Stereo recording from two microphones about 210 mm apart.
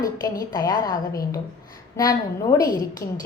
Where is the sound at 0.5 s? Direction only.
20° left (ahead or behind).